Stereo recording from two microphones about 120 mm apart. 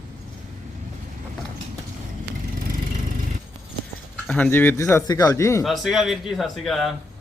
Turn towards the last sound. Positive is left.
turn(degrees=0)  # may be behind; listen again after turning